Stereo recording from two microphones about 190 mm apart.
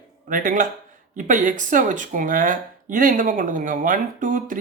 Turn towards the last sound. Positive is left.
turn(degrees=-45)  # may be behind; listen again after turning